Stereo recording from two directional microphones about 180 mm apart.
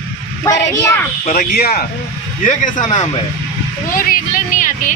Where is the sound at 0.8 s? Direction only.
15° left (ahead or behind).